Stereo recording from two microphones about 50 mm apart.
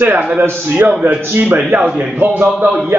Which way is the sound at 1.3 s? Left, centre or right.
Right.